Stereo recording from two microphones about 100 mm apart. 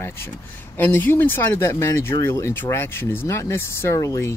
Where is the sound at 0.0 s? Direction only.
25° left (ahead or behind).